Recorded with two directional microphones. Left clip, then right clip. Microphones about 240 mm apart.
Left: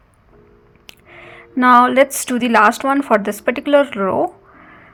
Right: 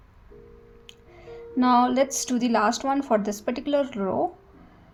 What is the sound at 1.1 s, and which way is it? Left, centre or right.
Music, centre.